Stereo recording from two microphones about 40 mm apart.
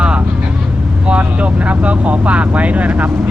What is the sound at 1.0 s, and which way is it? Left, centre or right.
Vehicle, right.